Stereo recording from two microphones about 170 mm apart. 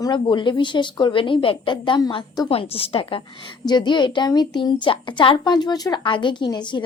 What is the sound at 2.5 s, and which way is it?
A woman's voice, 35° left (ahead or behind).